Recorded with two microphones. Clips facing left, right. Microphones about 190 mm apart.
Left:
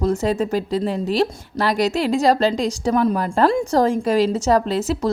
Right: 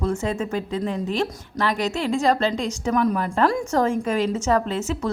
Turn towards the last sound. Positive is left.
turn(degrees=35)  # may be behind; listen again after turning